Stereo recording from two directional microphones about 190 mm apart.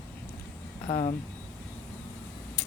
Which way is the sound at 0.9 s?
20° left (ahead or behind).